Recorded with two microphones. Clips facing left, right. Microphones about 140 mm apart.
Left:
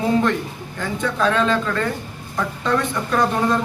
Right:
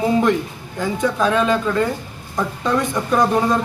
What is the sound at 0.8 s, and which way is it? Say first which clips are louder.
Speech: right 2 dB; 15° right (ahead or behind).